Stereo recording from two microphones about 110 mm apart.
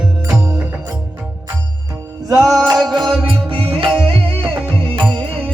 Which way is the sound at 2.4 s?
Centre (ahead or behind).